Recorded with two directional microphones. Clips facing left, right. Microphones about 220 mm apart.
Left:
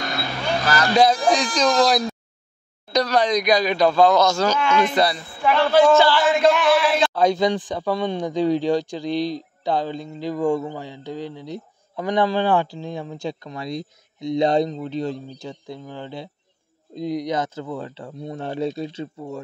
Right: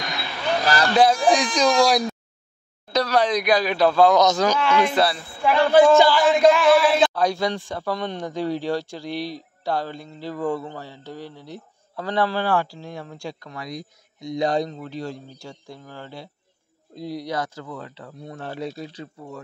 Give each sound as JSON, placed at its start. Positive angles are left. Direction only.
{"t": 0.9, "sound": "speech", "side_deg": -5}
{"t": 6.2, "sound": "a sound", "side_deg": 0}
{"t": 7.2, "sound": "a man's voice", "side_deg": 20}